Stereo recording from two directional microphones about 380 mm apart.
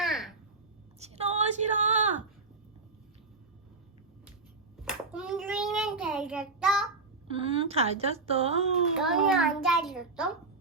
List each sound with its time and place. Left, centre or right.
0.0 s babbling: centre
0.9 s a sound: centre
4.8 s child singing: centre
7.3 s speech: centre
9.0 s a child's voice: centre